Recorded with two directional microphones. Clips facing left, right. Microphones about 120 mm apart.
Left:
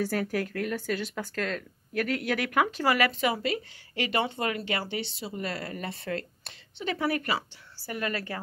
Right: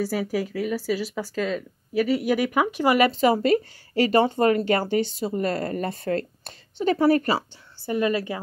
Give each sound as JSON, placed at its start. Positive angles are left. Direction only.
{"t": 0.0, "sound": "speech", "side_deg": -5}
{"t": 3.1, "sound": "speech", "side_deg": -35}
{"t": 7.8, "sound": "a woman's voice", "side_deg": -20}